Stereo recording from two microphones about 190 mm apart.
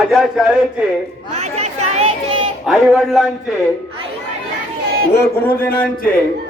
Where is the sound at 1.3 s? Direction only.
35° right (ahead or behind).